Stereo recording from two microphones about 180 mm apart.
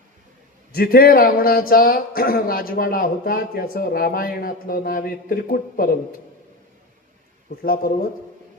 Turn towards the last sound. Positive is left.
turn(degrees=55)  # may be behind; listen again after turning